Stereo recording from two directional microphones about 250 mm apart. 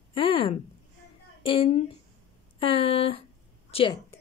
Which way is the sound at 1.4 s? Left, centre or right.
Left.